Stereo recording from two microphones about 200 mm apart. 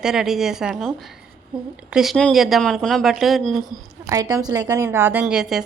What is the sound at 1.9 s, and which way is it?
A woman's voice, centre (ahead or behind).